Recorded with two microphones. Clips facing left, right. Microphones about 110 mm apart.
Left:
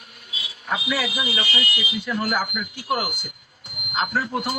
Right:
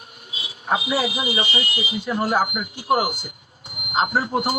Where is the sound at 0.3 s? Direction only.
30° right (ahead or behind).